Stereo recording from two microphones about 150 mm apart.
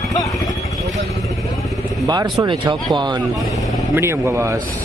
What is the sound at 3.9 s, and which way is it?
Speech, 15° right (ahead or behind).